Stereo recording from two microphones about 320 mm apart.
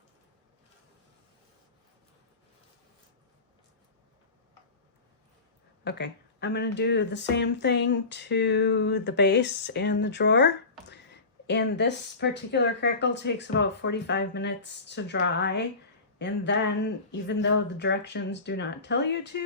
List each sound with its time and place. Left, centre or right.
5.8 s speech: left